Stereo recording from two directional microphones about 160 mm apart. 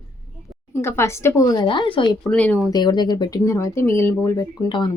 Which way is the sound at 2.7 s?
25° left (ahead or behind).